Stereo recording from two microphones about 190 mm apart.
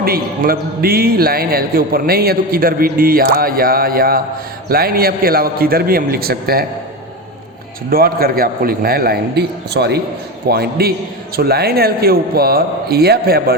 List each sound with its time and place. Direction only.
0.0 s a man's voice: 50° right (ahead or behind)
7.9 s a man's voice: 50° right (ahead or behind)